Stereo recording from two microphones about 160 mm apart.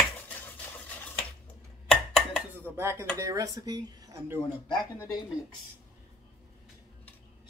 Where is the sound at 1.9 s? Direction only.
5° left (ahead or behind).